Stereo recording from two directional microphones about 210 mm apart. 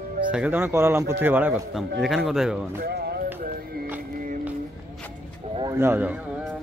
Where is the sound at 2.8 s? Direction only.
50° right (ahead or behind).